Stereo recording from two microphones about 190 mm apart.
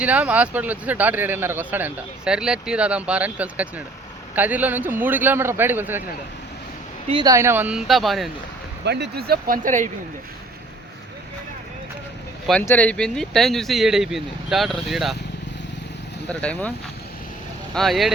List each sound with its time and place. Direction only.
0.0 s speech: 5° right (ahead or behind)
7.1 s speech: 20° right (ahead or behind); by 8.3 s centre (ahead or behind)
8.8 s speech: 60° right (ahead or behind); by 9.9 s 40° right (ahead or behind)
12.5 s speech: 5° left (ahead or behind)
16.3 s speech: 5° left (ahead or behind)
17.7 s speech: centre (ahead or behind)